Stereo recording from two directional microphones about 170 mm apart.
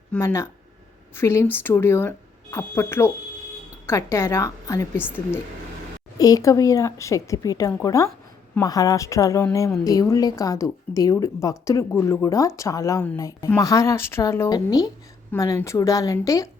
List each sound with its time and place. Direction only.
0.1 s speech: 15° left (ahead or behind)
6.1 s speech: 20° left (ahead or behind)